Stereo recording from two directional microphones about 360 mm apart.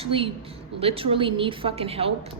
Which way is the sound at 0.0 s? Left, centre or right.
Centre.